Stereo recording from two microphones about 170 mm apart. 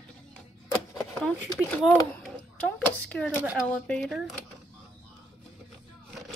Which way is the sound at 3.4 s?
5° right (ahead or behind).